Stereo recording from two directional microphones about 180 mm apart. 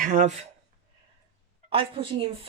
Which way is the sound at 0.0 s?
45° right (ahead or behind).